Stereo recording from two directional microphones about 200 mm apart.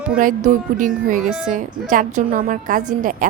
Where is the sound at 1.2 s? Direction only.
5° right (ahead or behind).